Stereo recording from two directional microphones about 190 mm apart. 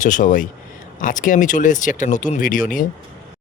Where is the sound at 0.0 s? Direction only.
45° left (ahead or behind).